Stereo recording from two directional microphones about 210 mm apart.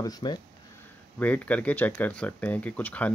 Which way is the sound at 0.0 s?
20° left (ahead or behind).